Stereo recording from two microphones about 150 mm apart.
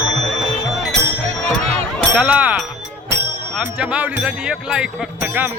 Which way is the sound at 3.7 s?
10° right (ahead or behind).